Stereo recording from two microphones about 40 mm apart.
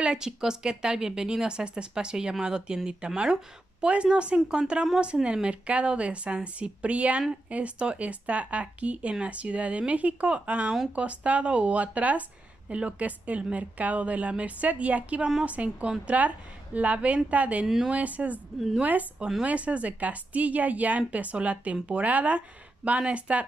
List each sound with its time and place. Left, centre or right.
0.0 s speech: centre; by 17.6 s right
17.6 s a woman's voice: centre
17.9 s speech: right
19.1 s speech: centre
19.4 s speech: right